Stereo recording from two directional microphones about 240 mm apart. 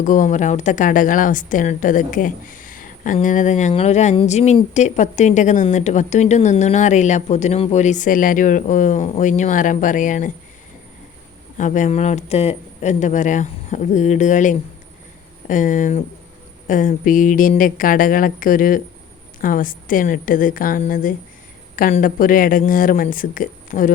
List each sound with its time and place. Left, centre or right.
0.0 s a woman's voice: left
11.5 s a woman's voice: left